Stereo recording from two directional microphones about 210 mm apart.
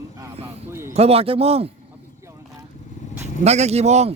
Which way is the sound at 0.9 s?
30° right (ahead or behind).